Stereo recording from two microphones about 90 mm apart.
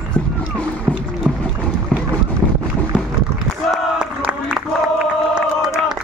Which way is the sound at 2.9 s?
15° left (ahead or behind).